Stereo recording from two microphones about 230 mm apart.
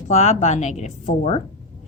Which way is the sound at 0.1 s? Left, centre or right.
Left.